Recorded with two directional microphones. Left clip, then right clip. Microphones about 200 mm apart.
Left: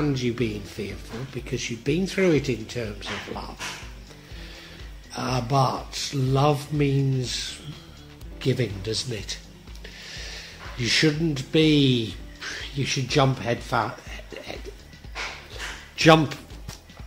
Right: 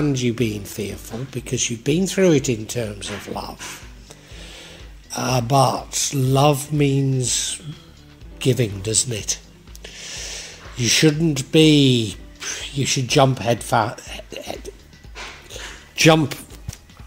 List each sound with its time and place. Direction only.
0.0 s speech: 35° right (ahead or behind)
5.1 s speech: 35° right (ahead or behind)
16.0 s speech: 35° right (ahead or behind)